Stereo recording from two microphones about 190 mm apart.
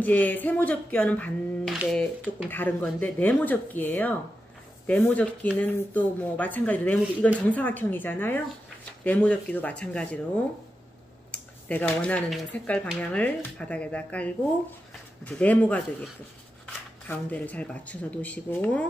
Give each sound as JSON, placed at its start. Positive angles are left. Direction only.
{"t": 0.0, "sound": "speech", "side_deg": 10}
{"t": 17.1, "sound": "speech", "side_deg": 10}